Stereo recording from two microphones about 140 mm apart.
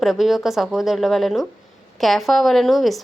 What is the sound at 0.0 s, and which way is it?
A woman's voice, centre (ahead or behind).